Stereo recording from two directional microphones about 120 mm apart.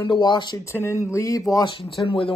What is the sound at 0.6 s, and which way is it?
Speech, 20° left (ahead or behind).